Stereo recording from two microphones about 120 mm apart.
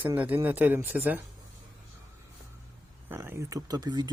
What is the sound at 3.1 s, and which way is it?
Speech, 20° right (ahead or behind).